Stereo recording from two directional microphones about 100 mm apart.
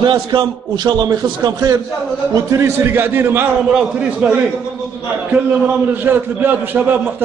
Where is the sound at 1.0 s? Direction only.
40° right (ahead or behind).